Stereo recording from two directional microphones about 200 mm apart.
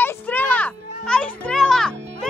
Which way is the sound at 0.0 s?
10° left (ahead or behind).